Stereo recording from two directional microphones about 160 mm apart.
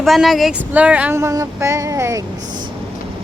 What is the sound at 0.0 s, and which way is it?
Speech, centre (ahead or behind).